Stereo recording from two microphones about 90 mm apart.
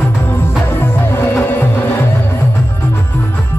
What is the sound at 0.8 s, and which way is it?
Music, 20° left (ahead or behind).